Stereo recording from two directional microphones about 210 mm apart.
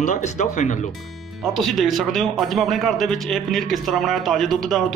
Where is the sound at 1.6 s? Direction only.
Centre (ahead or behind).